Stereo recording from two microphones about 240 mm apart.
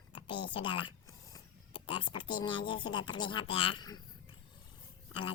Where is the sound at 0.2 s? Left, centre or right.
Centre.